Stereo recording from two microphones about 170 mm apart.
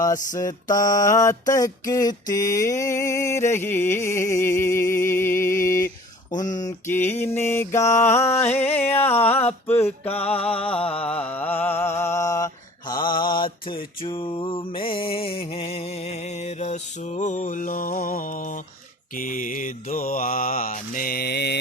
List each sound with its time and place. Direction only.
0.3 s mantra: 20° left (ahead or behind)
6.4 s a sound: 45° left (ahead or behind)
6.7 s mantra: 15° left (ahead or behind)
10.3 s mantra: 35° left (ahead or behind)
10.8 s mantra: 5° left (ahead or behind); by 21.6 s 75° left (ahead or behind)